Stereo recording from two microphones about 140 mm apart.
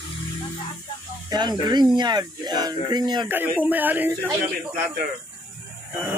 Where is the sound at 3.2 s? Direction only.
15° right (ahead or behind).